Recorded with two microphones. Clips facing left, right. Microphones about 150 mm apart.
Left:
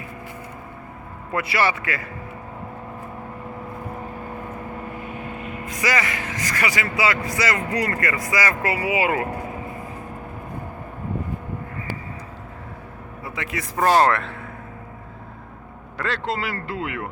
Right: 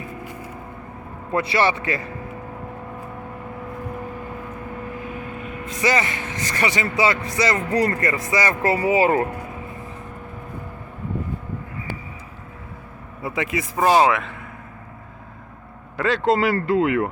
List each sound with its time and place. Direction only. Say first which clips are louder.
1.3 s speech: right 2 dB; 25° right (ahead or behind)
5.6 s speech: right 3 dB; 25° right (ahead or behind)
13.7 s speech: right 1 dB; 5° right (ahead or behind)
16.0 s speech: right 6 dB; centre (ahead or behind)
16.2 s speech: right 8 dB; 45° right (ahead or behind)